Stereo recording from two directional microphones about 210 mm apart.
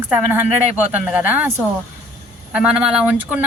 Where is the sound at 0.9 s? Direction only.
5° right (ahead or behind).